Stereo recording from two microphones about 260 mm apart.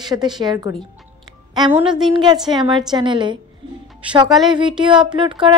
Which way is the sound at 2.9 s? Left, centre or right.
Centre.